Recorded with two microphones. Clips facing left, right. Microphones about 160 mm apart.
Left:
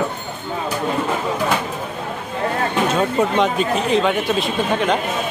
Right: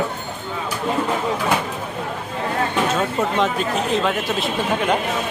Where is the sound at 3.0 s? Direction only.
Centre (ahead or behind).